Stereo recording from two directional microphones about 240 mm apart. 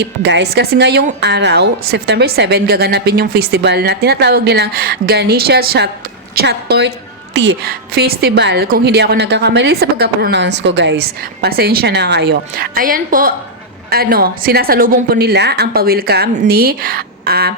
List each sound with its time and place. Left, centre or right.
0.0 s a woman's voice: right